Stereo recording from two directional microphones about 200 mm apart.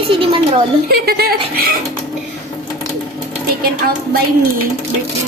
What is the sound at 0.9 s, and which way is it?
Speech, 50° right (ahead or behind).